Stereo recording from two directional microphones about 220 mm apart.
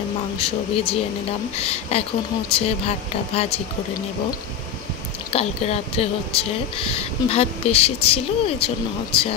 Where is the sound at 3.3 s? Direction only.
25° left (ahead or behind).